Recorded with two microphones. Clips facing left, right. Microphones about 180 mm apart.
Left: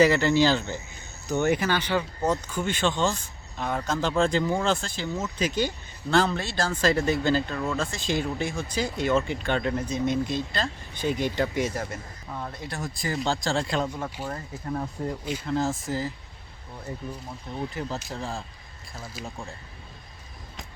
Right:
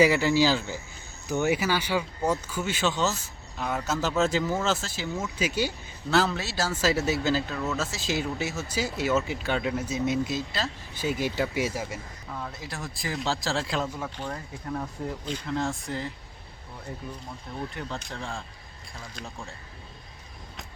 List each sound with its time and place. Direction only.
0.0 s speech: 10° right (ahead or behind)
13.8 s speech: 10° left (ahead or behind)
17.5 s speech: 20° left (ahead or behind)
17.9 s speech: 5° left (ahead or behind)